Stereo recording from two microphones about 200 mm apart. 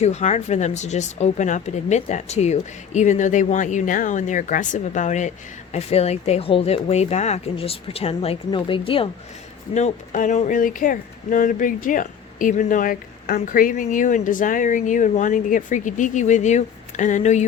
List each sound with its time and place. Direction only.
0.0 s speech: 35° left (ahead or behind)